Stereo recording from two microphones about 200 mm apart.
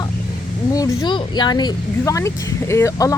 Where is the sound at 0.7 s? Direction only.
20° left (ahead or behind).